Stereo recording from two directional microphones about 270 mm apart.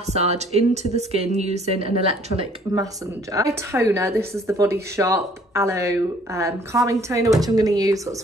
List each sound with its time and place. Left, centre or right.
0.0 s a woman's voice: right